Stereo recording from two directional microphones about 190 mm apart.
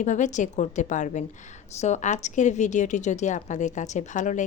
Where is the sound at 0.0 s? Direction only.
40° left (ahead or behind).